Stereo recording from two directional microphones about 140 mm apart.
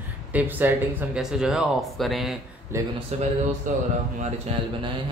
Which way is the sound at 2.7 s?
20° right (ahead or behind).